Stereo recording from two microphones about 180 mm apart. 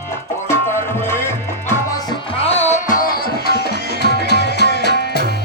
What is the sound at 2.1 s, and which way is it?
Music, 35° left (ahead or behind).